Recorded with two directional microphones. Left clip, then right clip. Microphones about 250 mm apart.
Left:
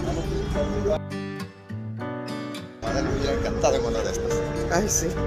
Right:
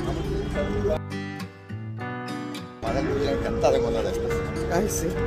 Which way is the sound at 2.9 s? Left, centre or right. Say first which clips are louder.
Right 1 dB; right.